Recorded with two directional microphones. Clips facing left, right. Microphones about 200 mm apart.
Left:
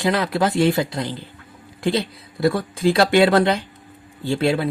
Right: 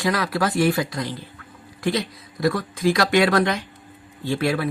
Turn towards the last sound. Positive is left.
turn(degrees=25)  # may be behind; listen again after turning